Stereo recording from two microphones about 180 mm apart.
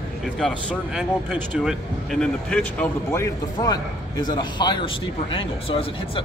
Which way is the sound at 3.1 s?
15° left (ahead or behind).